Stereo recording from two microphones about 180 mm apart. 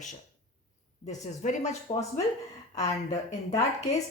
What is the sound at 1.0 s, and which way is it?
Speech, 40° left (ahead or behind).